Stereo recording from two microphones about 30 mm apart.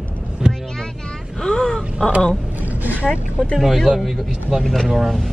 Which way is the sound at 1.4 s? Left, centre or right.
Left.